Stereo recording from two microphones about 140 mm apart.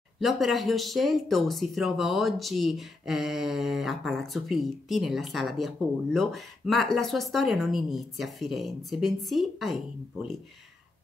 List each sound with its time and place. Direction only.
0.2 s speech: centre (ahead or behind)